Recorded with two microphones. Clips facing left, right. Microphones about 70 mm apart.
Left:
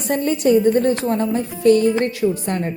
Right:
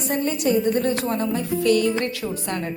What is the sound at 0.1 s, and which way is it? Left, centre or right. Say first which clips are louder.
A woman's voice: left 6 dB; left.